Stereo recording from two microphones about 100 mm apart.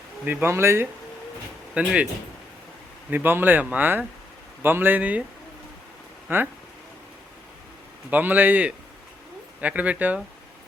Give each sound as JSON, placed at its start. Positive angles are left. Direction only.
{"t": 0.3, "sound": "speech", "side_deg": -20}
{"t": 1.7, "sound": "speech", "side_deg": -10}
{"t": 3.1, "sound": "speech", "side_deg": -20}
{"t": 6.2, "sound": "speech", "side_deg": -20}
{"t": 8.1, "sound": "speech", "side_deg": -20}